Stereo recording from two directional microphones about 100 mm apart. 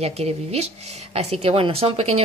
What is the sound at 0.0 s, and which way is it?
Speech, 90° right.